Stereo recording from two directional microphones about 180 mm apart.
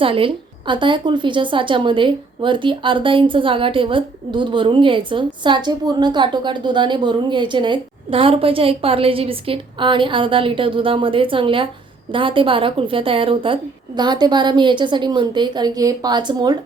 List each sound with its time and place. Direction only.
0.0 s a woman's voice: 30° right (ahead or behind)